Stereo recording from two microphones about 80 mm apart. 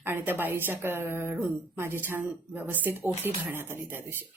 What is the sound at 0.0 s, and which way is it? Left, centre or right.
A woman's voice, right.